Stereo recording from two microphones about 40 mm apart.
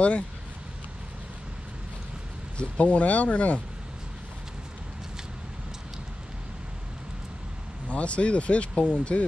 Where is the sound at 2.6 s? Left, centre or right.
Left.